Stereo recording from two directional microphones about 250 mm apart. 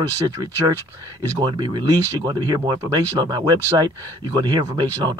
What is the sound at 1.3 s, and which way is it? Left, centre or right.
Speech, centre.